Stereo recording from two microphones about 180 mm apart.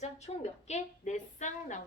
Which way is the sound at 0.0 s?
40° left (ahead or behind).